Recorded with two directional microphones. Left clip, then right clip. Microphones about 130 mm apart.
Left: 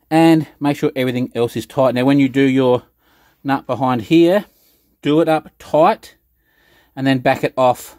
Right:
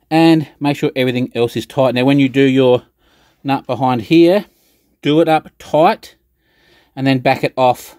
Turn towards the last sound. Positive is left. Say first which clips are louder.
# right 1 dB
turn(degrees=-10)  # may be behind; listen again after turning